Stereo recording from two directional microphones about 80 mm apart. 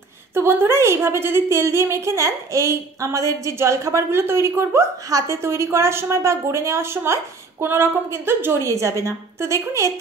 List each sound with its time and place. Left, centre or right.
0.3 s a woman's voice: right